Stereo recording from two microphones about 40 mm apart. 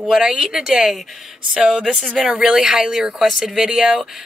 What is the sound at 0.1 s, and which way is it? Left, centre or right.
Speech, centre.